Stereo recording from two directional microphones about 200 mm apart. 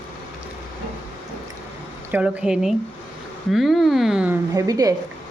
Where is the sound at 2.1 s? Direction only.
5° right (ahead or behind).